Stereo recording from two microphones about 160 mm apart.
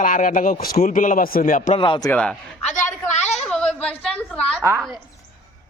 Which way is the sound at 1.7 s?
30° left (ahead or behind).